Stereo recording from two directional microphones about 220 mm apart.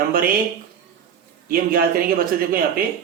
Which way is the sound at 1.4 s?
40° right (ahead or behind).